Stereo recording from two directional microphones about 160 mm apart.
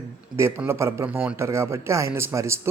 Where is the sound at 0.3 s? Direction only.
15° right (ahead or behind).